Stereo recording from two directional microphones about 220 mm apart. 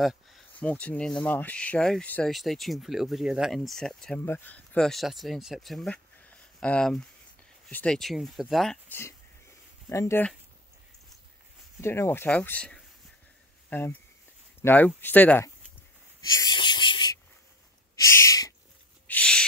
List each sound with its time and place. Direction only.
0.0 s speech: centre (ahead or behind)
11.8 s speech: 10° left (ahead or behind)
16.2 s wheeze: 15° left (ahead or behind)
17.9 s a sound: 15° left (ahead or behind)